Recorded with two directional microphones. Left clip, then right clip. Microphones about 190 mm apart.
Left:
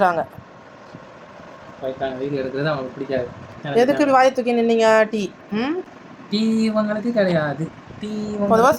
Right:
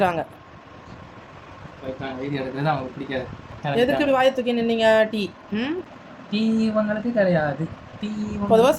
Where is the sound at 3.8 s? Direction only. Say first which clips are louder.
Left 4 dB; 15° left (ahead or behind).